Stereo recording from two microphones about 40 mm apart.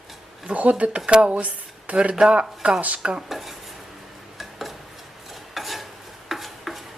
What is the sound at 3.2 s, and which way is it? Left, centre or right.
Dishes, centre.